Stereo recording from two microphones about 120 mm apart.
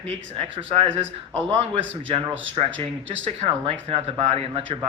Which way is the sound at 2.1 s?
50° right (ahead or behind).